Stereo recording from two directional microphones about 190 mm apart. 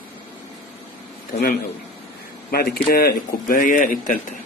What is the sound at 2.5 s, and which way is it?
Speech, 55° left (ahead or behind).